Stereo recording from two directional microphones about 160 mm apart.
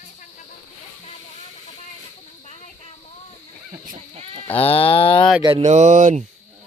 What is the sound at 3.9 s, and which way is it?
Speech, 40° right (ahead or behind).